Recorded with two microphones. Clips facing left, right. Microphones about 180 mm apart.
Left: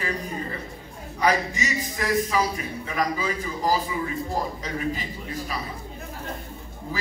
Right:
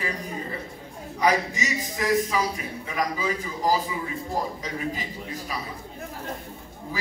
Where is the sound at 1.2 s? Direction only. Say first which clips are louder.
Even; 20° right (ahead or behind).